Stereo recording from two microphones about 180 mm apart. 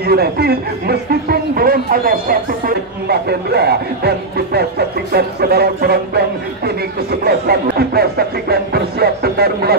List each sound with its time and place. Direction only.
0.0 s speech: 60° right (ahead or behind)